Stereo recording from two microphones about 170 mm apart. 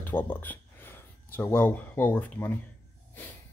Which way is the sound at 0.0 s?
10° left (ahead or behind).